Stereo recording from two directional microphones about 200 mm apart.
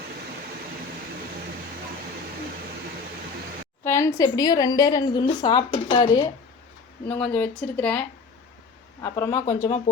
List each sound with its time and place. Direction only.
3.8 s a sound: 15° left (ahead or behind)
4.2 s a woman's voice: 20° left (ahead or behind)
7.2 s speech: 5° left (ahead or behind)